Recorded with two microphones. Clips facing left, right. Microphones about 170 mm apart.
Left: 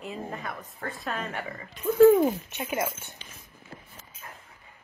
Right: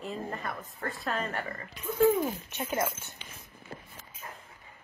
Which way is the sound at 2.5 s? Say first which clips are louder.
Left 1 dB; 15° left (ahead or behind).